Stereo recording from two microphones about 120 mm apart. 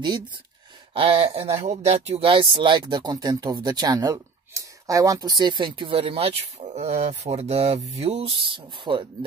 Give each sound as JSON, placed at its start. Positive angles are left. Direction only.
{"t": 0.9, "sound": "speech", "side_deg": -50}